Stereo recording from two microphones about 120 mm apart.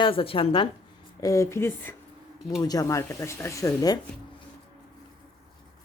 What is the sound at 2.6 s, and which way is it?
Speech, 30° left (ahead or behind).